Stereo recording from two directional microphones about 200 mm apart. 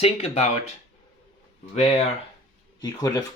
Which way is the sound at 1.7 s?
30° left (ahead or behind).